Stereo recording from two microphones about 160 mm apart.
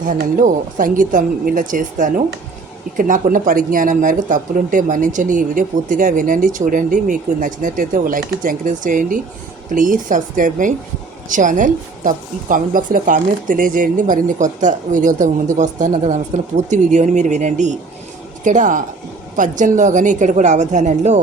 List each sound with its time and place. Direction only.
0.0 s a woman's voice: 55° right (ahead or behind)